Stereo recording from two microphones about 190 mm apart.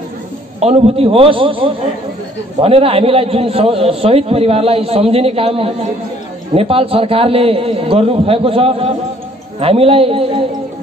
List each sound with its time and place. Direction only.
0.6 s a man's voice: 35° right (ahead or behind)